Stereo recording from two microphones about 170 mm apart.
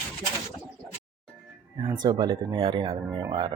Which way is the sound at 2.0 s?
25° right (ahead or behind).